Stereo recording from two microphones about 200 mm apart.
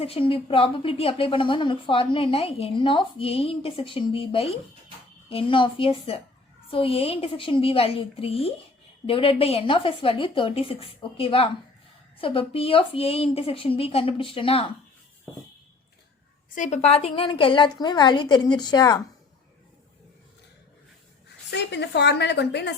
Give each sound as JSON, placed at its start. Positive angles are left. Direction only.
{"t": 0.0, "sound": "a woman's voice", "side_deg": 30}
{"t": 16.6, "sound": "a woman's voice", "side_deg": 35}
{"t": 21.5, "sound": "a woman's voice", "side_deg": 55}